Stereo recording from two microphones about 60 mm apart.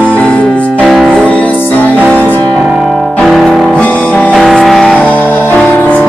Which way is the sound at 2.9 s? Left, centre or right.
Centre.